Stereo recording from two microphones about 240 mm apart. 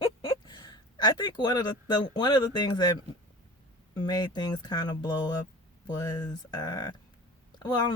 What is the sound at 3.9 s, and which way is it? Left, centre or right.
Speech, centre.